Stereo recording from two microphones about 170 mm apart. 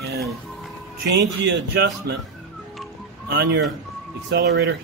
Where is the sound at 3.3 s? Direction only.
75° right (ahead or behind).